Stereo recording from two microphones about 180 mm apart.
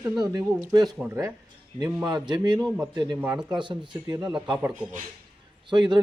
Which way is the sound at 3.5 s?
25° right (ahead or behind).